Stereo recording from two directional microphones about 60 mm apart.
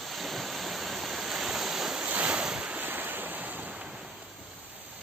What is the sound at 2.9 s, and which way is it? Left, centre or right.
Waves, right.